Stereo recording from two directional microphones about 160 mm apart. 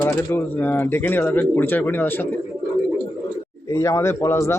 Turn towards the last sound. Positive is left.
turn(degrees=15)  # may be behind; listen again after turning